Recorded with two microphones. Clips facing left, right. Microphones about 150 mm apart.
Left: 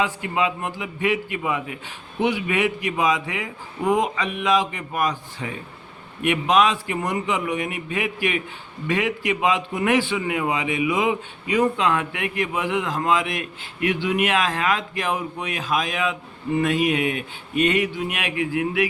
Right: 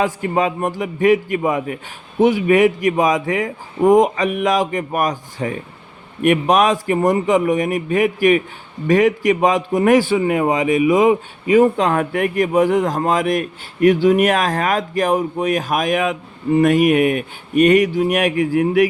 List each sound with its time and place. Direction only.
0.0 s a man's voice: 45° right (ahead or behind)
17.2 s speech: 25° left (ahead or behind)
17.7 s a man's voice: 40° right (ahead or behind)